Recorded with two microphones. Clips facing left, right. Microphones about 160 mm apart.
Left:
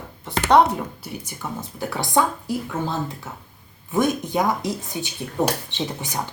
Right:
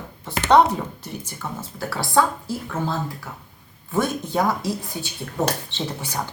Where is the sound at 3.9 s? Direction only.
15° left (ahead or behind).